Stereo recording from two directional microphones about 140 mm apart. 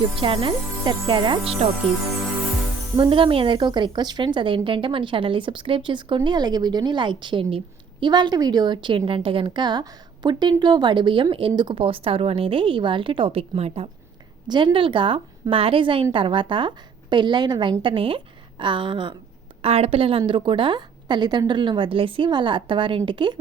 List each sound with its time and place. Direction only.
0.2 s a woman's voice: 40° right (ahead or behind)
3.0 s a woman's voice: 40° right (ahead or behind)
14.4 s a woman's voice: 35° right (ahead or behind)